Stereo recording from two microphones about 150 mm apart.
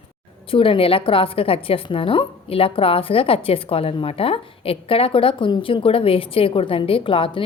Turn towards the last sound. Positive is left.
turn(degrees=35)  # may be behind; listen again after turning